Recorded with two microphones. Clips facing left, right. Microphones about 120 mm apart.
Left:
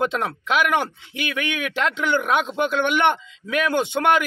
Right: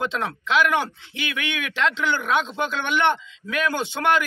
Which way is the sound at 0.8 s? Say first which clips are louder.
Left 1 dB; 50° left (ahead or behind).